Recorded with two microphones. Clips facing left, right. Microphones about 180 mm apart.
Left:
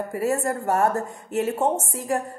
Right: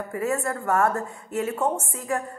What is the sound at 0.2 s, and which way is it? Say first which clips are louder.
A woman's voice: left 2 dB; 35° left (ahead or behind).